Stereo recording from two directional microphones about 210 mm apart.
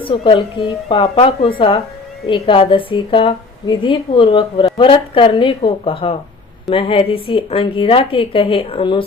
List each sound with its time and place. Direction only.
0.0 s a woman's voice: 25° left (ahead or behind)